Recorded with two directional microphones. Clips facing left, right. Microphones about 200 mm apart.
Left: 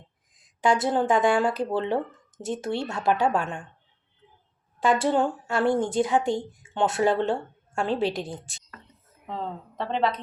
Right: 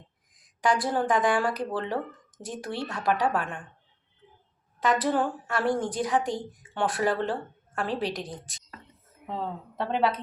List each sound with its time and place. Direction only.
0.3 s a woman's voice: 25° left (ahead or behind)
4.8 s a woman's voice: 30° left (ahead or behind)
9.2 s a woman's voice: 5° right (ahead or behind)